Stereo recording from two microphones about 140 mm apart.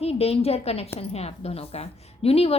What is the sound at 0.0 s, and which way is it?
A woman's voice, 45° left (ahead or behind).